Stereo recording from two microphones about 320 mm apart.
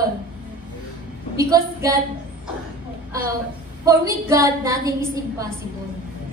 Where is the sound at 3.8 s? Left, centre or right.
Centre.